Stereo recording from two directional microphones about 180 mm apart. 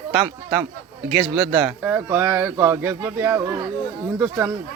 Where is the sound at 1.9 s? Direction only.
10° right (ahead or behind).